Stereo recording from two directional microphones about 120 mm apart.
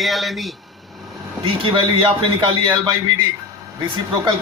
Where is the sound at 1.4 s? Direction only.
45° right (ahead or behind).